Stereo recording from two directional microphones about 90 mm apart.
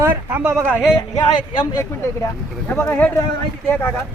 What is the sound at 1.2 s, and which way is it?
Speech, 60° left (ahead or behind).